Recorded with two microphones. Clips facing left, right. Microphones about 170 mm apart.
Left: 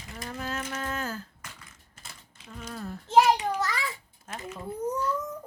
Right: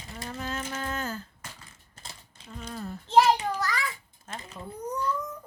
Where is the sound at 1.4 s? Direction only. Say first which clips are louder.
Right 1 dB; 35° right (ahead or behind).